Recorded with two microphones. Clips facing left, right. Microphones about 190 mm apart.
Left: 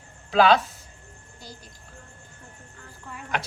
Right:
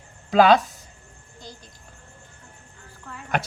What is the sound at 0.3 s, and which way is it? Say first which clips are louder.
Speech: right 3 dB; 45° right (ahead or behind).